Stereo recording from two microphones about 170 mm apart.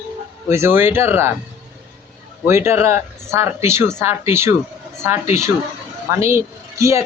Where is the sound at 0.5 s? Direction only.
15° right (ahead or behind).